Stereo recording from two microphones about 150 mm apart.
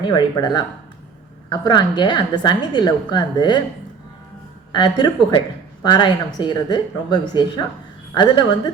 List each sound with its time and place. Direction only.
0.0 s a woman's voice: 30° left (ahead or behind)
4.7 s a woman's voice: 30° left (ahead or behind)